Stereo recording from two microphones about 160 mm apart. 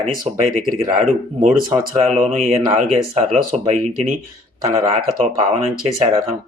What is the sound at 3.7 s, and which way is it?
Speech, 55° right (ahead or behind).